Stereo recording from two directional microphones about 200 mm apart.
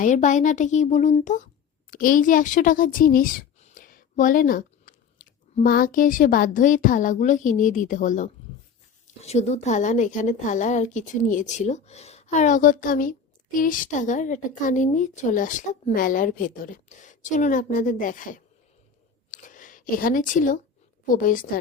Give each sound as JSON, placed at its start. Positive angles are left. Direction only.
{"t": 0.0, "sound": "speech", "side_deg": 40}
{"t": 19.3, "sound": "a sound", "side_deg": 40}
{"t": 21.1, "sound": "a woman's voice", "side_deg": 45}